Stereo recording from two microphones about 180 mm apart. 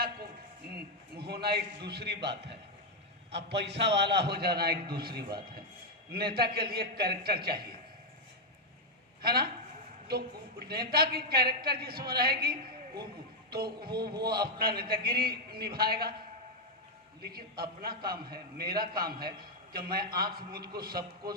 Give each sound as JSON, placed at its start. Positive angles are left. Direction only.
{"t": 0.7, "sound": "a man's voice", "side_deg": -60}
{"t": 9.2, "sound": "a man's voice", "side_deg": -60}
{"t": 10.7, "sound": "a man's voice", "side_deg": -60}
{"t": 13.9, "sound": "a man's voice", "side_deg": -25}
{"t": 14.6, "sound": "a man's voice", "side_deg": -60}
{"t": 17.2, "sound": "a man's voice", "side_deg": -60}